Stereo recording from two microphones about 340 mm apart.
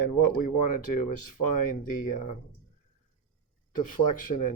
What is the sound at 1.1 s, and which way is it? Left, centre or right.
Speech, left.